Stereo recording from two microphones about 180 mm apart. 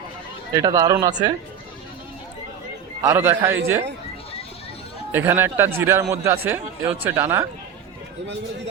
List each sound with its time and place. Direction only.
0.5 s speech: 20° right (ahead or behind)
3.0 s speech: 15° right (ahead or behind)
5.1 s speech: 10° right (ahead or behind)